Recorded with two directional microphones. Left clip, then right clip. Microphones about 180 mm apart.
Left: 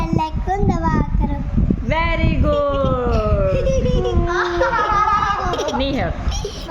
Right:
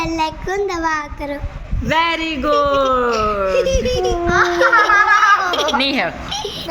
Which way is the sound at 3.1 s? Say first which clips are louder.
Right 3 dB; 15° left (ahead or behind).